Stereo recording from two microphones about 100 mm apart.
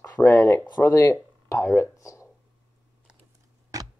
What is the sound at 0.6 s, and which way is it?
Speech, 45° left (ahead or behind).